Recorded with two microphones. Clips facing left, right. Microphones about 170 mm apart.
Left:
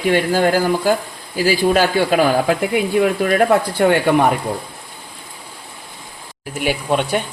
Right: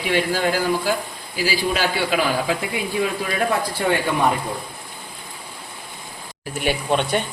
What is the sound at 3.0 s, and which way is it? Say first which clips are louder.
Speech: left 5 dB; 60° left (ahead or behind).